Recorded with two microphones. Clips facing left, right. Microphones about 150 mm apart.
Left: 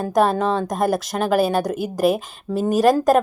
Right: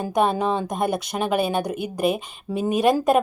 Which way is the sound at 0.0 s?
Centre (ahead or behind).